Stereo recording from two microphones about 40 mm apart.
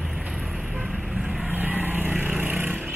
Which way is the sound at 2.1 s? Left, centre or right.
Right.